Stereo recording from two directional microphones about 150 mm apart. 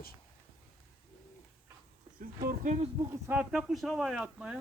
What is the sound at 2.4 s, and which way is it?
Speech, 60° right (ahead or behind).